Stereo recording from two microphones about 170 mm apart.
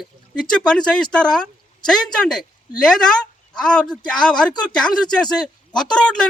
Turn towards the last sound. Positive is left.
turn(degrees=5)  # may be behind; listen again after turning